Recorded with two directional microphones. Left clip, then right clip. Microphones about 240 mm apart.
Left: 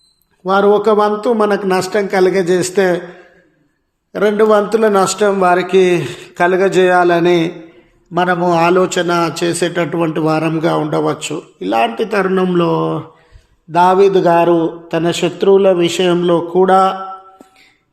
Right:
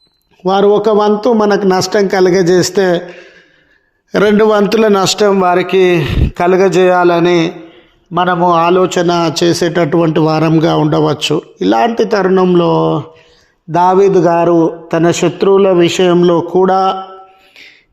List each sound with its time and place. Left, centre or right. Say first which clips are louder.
0.4 s speech: right 2 dB; right
4.1 s a man's voice: right 2 dB; right; by 9.0 s centre
9.0 s speech: right 3 dB; right